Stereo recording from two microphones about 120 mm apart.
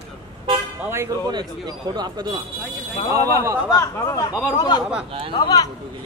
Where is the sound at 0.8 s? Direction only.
20° right (ahead or behind).